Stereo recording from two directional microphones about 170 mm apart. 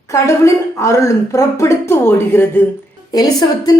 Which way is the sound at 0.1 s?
15° left (ahead or behind).